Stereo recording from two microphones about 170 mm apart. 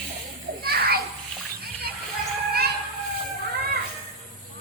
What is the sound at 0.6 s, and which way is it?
Children playing, 65° right (ahead or behind).